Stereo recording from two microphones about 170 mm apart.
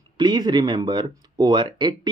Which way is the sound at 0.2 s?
25° right (ahead or behind).